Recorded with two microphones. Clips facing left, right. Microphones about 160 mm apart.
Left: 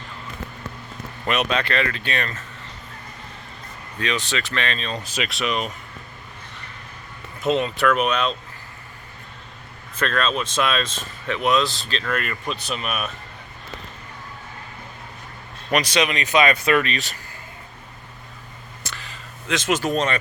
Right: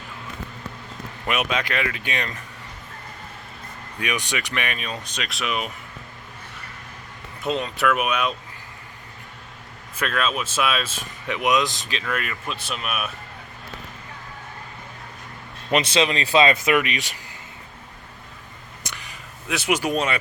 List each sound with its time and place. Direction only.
1.3 s speech: 10° right (ahead or behind)
4.0 s speech: 15° right (ahead or behind)
5.1 s speech: centre (ahead or behind)
7.4 s speech: centre (ahead or behind)
10.0 s speech: 5° right (ahead or behind)
15.7 s speech: 25° right (ahead or behind)
16.6 s speech: 15° right (ahead or behind)
18.8 s a sound: 15° right (ahead or behind)